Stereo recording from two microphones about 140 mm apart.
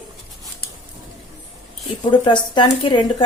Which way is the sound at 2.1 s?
35° left (ahead or behind).